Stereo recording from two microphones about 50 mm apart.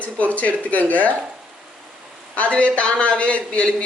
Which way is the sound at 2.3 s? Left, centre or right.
Left.